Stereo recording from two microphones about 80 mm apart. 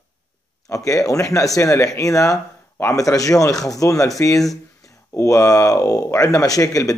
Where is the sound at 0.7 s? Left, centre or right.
Left.